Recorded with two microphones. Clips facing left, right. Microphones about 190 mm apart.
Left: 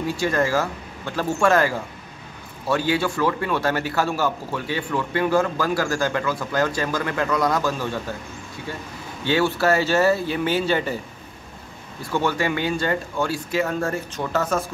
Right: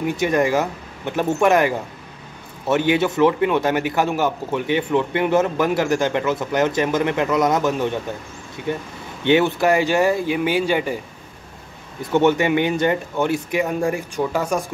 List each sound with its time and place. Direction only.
0.0 s a man's voice: 20° right (ahead or behind)
12.1 s speech: 20° right (ahead or behind)